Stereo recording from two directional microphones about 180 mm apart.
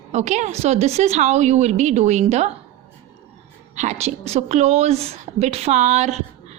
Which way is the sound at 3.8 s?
40° right (ahead or behind).